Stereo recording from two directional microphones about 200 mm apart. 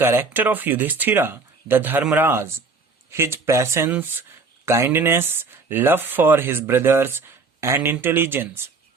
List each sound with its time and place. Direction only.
0.0 s speech: 10° right (ahead or behind)